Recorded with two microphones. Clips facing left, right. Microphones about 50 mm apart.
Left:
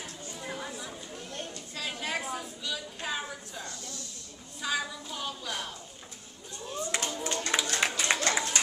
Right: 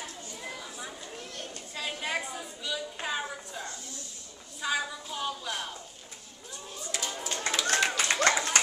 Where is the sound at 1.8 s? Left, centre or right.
Centre.